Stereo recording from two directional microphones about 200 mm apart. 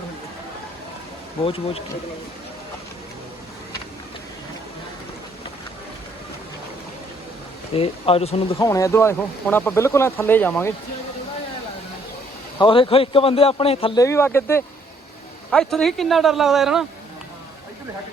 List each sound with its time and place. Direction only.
1.5 s speech: 30° left (ahead or behind)
7.8 s speech: 30° left (ahead or behind)
8.5 s speech: 15° left (ahead or behind)
12.5 s speech: 25° left (ahead or behind)
14.0 s speech: 15° left (ahead or behind)